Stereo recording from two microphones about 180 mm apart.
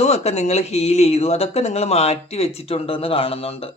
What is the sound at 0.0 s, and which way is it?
Speech, 35° left (ahead or behind).